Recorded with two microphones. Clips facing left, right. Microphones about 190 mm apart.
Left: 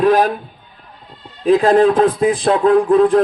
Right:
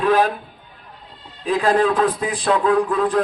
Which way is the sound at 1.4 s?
45° left (ahead or behind).